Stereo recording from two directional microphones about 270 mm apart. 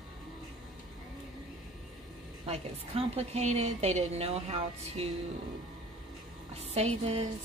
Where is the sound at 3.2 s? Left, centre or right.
Right.